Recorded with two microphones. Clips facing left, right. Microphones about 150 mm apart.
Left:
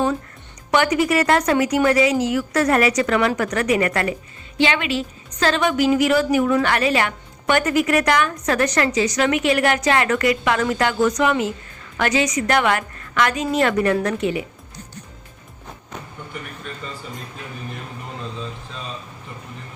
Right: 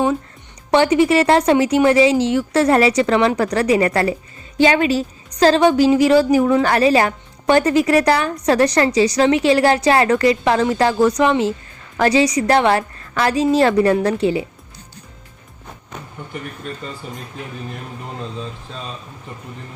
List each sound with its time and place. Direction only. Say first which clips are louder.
0.7 s a woman's voice: right 4 dB; 30° right (ahead or behind)